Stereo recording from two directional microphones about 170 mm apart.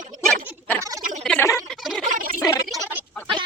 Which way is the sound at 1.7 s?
Centre (ahead or behind).